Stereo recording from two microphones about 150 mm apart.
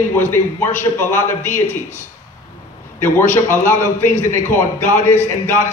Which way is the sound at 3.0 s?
15° left (ahead or behind).